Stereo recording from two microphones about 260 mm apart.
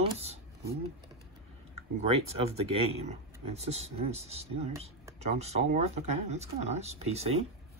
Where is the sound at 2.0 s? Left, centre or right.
Right.